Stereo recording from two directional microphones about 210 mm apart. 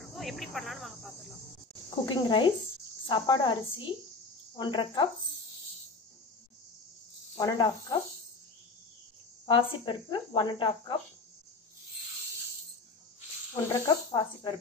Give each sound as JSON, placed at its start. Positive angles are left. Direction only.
{"t": 0.0, "sound": "speech", "side_deg": 0}
{"t": 2.0, "sound": "speech", "side_deg": 20}
{"t": 7.3, "sound": "speech", "side_deg": 20}
{"t": 9.5, "sound": "speech", "side_deg": 25}
{"t": 13.7, "sound": "speech", "side_deg": 20}